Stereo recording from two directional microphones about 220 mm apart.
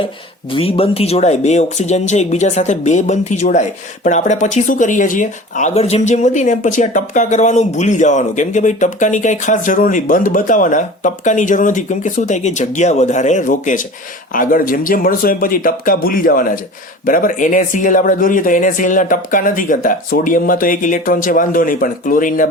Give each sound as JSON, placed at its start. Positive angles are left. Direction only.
{"t": 0.5, "sound": "speech", "side_deg": 25}